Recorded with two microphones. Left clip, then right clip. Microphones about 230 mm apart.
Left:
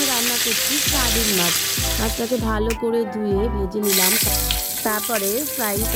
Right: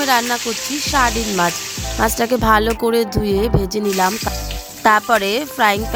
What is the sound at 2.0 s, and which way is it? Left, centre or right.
Speech, right.